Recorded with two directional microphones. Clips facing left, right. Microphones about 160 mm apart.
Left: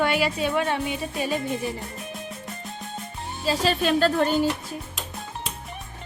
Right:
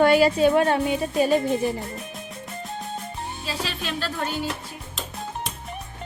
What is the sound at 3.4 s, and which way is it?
Speech, 45° left (ahead or behind).